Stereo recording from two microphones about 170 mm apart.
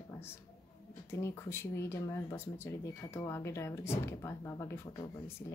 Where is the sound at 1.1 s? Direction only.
15° left (ahead or behind).